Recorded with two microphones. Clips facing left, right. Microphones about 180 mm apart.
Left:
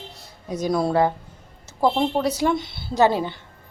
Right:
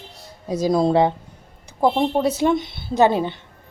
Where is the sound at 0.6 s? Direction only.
25° right (ahead or behind).